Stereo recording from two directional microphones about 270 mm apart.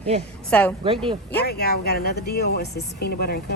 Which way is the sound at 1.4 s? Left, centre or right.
Left.